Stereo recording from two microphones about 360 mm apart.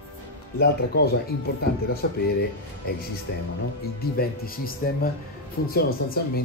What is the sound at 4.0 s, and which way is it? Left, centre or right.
Speech, left.